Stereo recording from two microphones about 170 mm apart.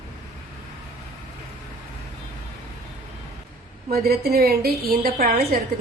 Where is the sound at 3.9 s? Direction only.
65° right (ahead or behind).